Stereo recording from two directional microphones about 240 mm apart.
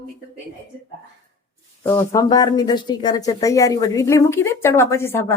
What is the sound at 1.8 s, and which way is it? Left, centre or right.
Speech, centre.